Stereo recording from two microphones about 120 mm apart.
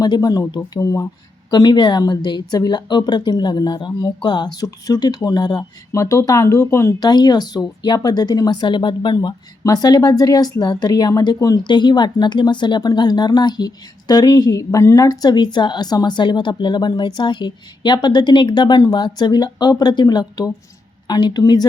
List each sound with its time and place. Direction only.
0.0 s speech: 30° left (ahead or behind)
7.0 s speech: 35° left (ahead or behind)